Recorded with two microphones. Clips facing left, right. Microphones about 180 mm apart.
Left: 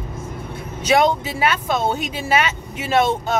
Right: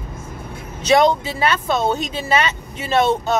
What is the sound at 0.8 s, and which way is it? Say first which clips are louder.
Speech: right 2 dB; 10° left (ahead or behind).